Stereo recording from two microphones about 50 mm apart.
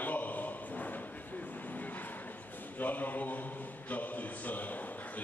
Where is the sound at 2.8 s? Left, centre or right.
Left.